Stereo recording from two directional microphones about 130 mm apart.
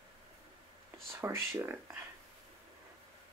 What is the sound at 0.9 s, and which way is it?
Speech, 20° right (ahead or behind).